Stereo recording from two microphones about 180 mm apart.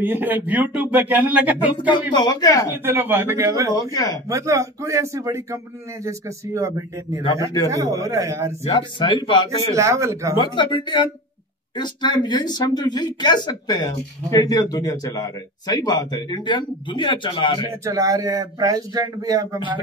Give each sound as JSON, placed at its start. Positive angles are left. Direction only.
{"t": 0.0, "sound": "speech", "side_deg": -10}
{"t": 1.8, "sound": "a man's voice", "side_deg": 25}
{"t": 2.8, "sound": "speech", "side_deg": -10}
{"t": 3.9, "sound": "a man's voice", "side_deg": 20}
{"t": 4.3, "sound": "speech", "side_deg": -15}
{"t": 8.6, "sound": "a man's voice", "side_deg": 25}
{"t": 9.7, "sound": "speech", "side_deg": -15}
{"t": 10.3, "sound": "a man's voice", "side_deg": 25}
{"t": 17.8, "sound": "speech", "side_deg": -20}